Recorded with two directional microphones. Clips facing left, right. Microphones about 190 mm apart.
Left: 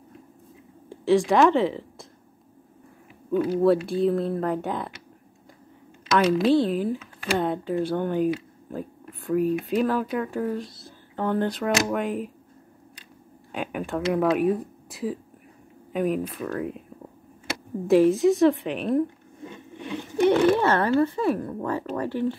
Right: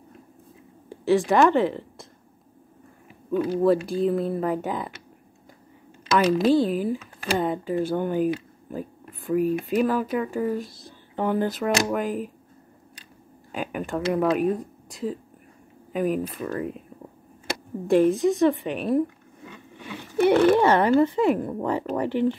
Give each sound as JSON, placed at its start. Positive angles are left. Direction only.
{"t": 0.8, "sound": "speech", "side_deg": 0}
{"t": 3.3, "sound": "a woman's voice", "side_deg": 0}
{"t": 6.0, "sound": "a sound", "side_deg": 0}
{"t": 6.5, "sound": "a woman's voice", "side_deg": -5}
{"t": 13.5, "sound": "a woman's voice", "side_deg": 0}
{"t": 17.8, "sound": "a woman's voice", "side_deg": 0}